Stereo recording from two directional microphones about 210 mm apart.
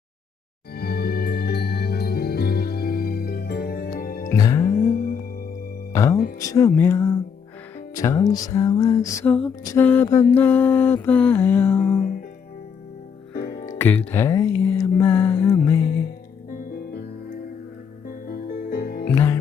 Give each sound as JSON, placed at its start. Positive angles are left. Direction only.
{"t": 0.8, "sound": "music", "side_deg": 50}
{"t": 4.3, "sound": "music", "side_deg": 15}
{"t": 4.8, "sound": "music", "side_deg": 40}
{"t": 5.9, "sound": "music", "side_deg": 15}
{"t": 6.4, "sound": "mantra", "side_deg": 15}
{"t": 13.5, "sound": "music", "side_deg": 45}
{"t": 13.7, "sound": "mantra", "side_deg": 10}
{"t": 16.6, "sound": "music", "side_deg": 45}
{"t": 19.1, "sound": "music", "side_deg": 15}